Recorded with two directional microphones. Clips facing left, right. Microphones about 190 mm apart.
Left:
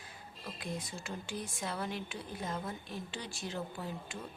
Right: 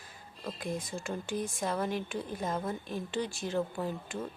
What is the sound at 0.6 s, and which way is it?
Speech, 50° right (ahead or behind).